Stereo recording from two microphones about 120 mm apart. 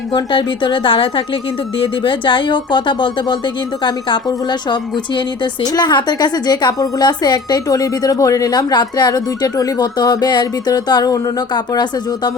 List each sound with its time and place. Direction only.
0.1 s a woman's voice: 40° left (ahead or behind)